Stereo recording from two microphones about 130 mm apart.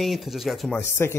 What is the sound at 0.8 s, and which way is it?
Speech, 20° left (ahead or behind).